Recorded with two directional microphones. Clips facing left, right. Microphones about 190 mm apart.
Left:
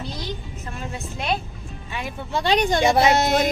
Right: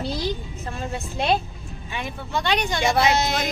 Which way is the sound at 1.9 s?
Centre (ahead or behind).